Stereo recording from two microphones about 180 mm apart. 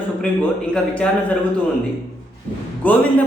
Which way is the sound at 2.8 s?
10° left (ahead or behind).